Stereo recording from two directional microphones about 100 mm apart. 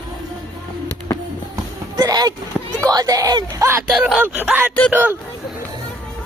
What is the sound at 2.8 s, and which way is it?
Speech, 35° right (ahead or behind).